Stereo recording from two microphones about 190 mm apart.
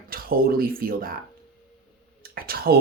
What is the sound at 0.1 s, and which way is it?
Speech, 50° right (ahead or behind).